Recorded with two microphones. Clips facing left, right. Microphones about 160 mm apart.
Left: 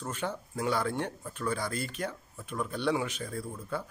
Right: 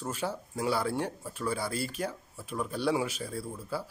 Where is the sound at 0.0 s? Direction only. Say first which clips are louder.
Right 1 dB; 10° right (ahead or behind).